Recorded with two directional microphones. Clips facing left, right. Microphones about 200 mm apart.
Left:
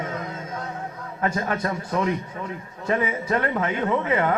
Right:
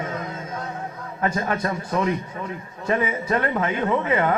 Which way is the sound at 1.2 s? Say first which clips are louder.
Right 1 dB; 20° right (ahead or behind).